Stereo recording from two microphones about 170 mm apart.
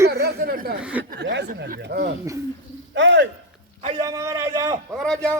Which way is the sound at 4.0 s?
20° right (ahead or behind).